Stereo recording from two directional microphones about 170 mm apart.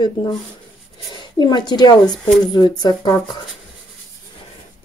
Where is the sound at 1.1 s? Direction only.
25° left (ahead or behind).